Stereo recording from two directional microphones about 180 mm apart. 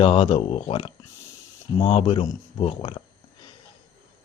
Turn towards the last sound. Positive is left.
turn(degrees=25)  # may be behind; listen again after turning